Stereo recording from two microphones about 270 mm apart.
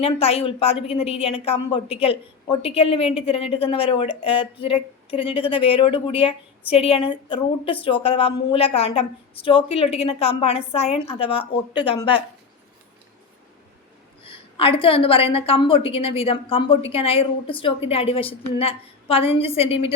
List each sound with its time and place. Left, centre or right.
0.0 s speech: left
14.3 s speech: centre